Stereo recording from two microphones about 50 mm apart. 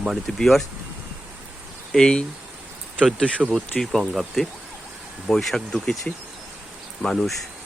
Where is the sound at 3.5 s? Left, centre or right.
Centre.